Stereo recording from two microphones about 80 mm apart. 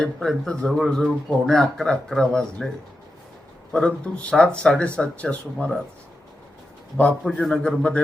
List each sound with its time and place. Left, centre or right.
0.0 s speech: centre
3.7 s speech: centre
6.9 s speech: centre